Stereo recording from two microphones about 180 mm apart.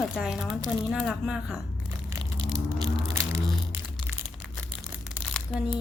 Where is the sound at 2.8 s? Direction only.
20° right (ahead or behind).